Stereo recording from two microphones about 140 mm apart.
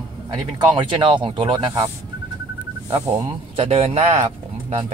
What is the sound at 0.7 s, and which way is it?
Speech, 35° right (ahead or behind).